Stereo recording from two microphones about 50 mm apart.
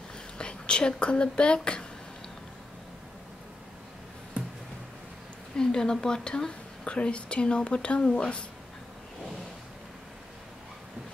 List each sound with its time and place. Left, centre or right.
0.4 s speech: centre
5.6 s a woman's voice: centre